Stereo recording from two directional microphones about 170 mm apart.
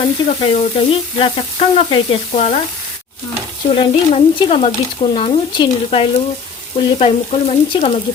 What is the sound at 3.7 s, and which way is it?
Speech, 30° left (ahead or behind).